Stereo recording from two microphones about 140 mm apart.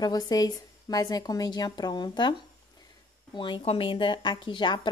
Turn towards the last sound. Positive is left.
turn(degrees=35)  # may be behind; listen again after turning